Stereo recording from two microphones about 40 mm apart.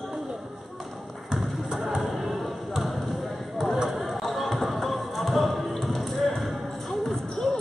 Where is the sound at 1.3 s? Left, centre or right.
Centre.